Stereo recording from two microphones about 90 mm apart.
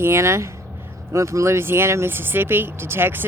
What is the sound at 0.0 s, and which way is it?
Speech, 30° right (ahead or behind).